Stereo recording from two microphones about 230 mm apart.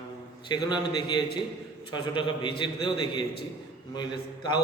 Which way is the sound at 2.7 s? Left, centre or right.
Left.